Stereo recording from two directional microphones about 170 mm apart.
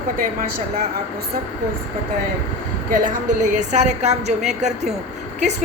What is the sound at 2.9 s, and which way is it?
Speech, 50° right (ahead or behind).